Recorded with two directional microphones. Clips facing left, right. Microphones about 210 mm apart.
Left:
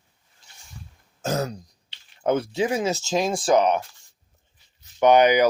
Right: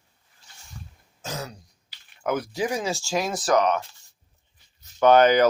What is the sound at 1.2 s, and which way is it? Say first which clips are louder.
Throat clearing: left 9 dB; 45° left (ahead or behind).